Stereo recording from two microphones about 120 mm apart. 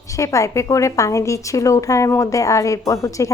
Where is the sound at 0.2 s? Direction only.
25° left (ahead or behind).